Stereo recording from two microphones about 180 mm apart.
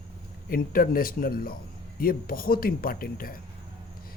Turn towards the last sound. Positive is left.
turn(degrees=55)  # may be behind; listen again after turning